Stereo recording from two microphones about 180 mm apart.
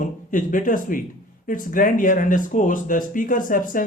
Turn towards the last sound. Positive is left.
turn(degrees=50)  # may be behind; listen again after turning